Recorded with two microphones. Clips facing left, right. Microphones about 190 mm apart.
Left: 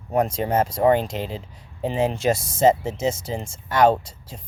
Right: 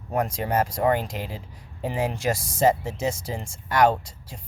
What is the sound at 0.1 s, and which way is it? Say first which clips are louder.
Speech: left 4 dB; 20° left (ahead or behind).